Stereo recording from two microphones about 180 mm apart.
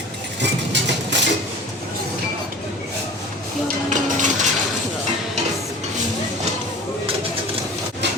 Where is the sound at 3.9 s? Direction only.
45° right (ahead or behind).